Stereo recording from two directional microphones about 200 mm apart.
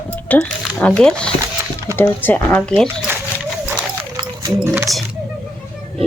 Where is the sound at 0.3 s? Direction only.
5° left (ahead or behind).